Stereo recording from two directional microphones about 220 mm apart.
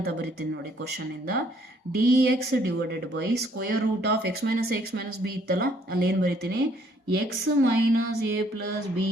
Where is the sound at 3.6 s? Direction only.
45° right (ahead or behind).